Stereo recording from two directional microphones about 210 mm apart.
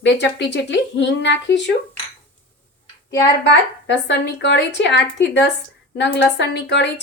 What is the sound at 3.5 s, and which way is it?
Speech, 55° left (ahead or behind).